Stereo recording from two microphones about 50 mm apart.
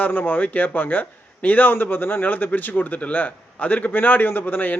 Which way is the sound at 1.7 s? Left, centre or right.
Left.